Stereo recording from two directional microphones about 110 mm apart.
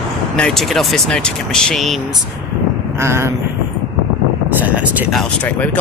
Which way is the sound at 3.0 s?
25° right (ahead or behind).